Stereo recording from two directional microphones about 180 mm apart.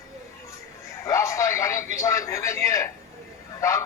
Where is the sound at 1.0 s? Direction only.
15° left (ahead or behind).